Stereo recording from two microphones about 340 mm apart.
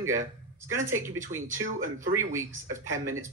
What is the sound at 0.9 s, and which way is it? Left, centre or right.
Speech, centre.